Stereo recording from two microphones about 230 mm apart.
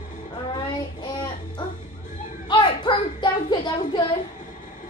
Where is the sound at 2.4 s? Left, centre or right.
Centre.